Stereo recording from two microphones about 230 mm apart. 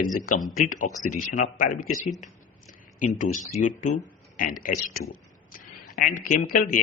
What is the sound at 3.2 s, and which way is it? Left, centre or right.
Speech, left.